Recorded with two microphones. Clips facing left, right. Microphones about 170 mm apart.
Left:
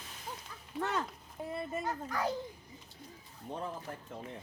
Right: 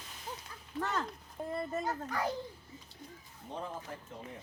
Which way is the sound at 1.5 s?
5° left (ahead or behind).